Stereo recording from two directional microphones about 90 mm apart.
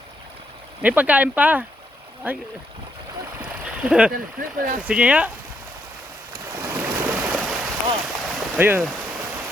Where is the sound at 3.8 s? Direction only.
10° right (ahead or behind).